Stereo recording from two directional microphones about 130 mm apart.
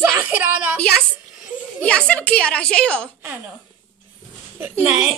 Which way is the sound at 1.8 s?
10° left (ahead or behind).